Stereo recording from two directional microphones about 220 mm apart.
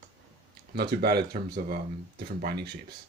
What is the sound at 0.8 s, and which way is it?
Speech, 45° right (ahead or behind).